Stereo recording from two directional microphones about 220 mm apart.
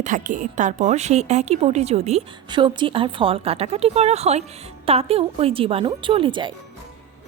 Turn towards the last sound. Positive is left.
turn(degrees=-20)  # may be behind; listen again after turning